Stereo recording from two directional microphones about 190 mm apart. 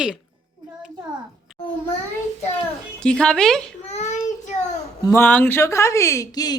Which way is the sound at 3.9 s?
35° left (ahead or behind).